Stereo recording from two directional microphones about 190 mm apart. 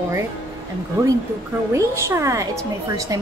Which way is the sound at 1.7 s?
15° right (ahead or behind).